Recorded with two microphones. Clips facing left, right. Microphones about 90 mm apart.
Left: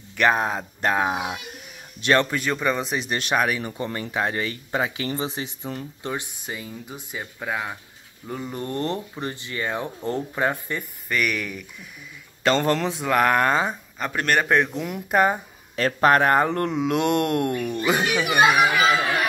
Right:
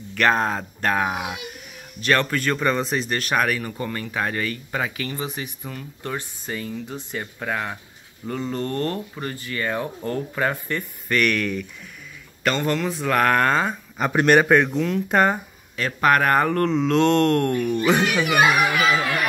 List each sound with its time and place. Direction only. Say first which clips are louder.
0.1 s speech: right 1 dB; 10° left (ahead or behind)
3.2 s speech: left 1 dB; 20° left (ahead or behind)
6.0 s speech: right 1 dB; 15° left (ahead or behind)
12.4 s speech: left 2 dB; 35° left (ahead or behind)
12.9 s speech: right 2 dB; 15° left (ahead or behind)
13.9 s speech: right 7 dB; 10° right (ahead or behind)
14.4 s speech: right 3 dB; centre (ahead or behind)
14.8 s speech: right 2 dB; 15° left (ahead or behind)
15.7 s speech: left 1 dB; 35° left (ahead or behind); by 18.2 s 5° left (ahead or behind)
18.4 s speech: left 2 dB; 35° left (ahead or behind)